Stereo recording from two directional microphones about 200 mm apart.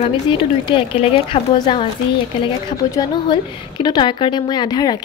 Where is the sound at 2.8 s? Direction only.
20° left (ahead or behind).